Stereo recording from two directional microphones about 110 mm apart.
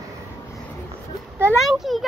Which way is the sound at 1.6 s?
Centre (ahead or behind).